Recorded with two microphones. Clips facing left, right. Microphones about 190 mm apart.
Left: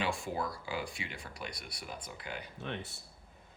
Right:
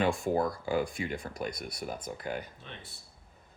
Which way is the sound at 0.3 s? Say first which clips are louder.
Right 8 dB; 50° right (ahead or behind).